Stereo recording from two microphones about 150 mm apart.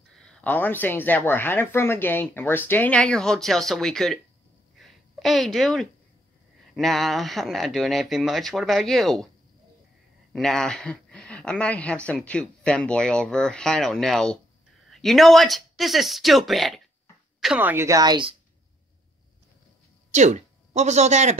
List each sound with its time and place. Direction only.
0.1 s speech: 5° left (ahead or behind)
4.7 s a sound: centre (ahead or behind)
6.7 s a woman's voice: centre (ahead or behind)
10.3 s a woman's voice: 5° left (ahead or behind)
17.6 s a woman's voice: 15° right (ahead or behind)
20.1 s speech: 50° right (ahead or behind)